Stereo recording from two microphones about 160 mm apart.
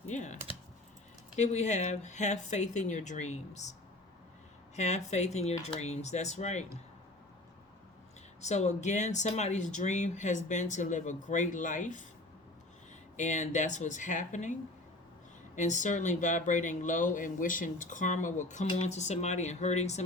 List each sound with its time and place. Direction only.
0.1 s typing: 50° left (ahead or behind)
1.4 s speech: 45° left (ahead or behind)
4.8 s speech: 45° left (ahead or behind)
8.4 s speech: 45° left (ahead or behind)
13.1 s speech: 50° left (ahead or behind)
15.5 s speech: 50° left (ahead or behind)